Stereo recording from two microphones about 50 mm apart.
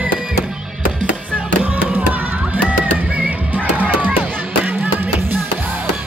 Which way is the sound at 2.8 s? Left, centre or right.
Right.